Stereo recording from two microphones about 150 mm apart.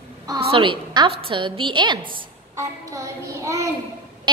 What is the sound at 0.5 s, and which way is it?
A woman's voice, 35° right (ahead or behind).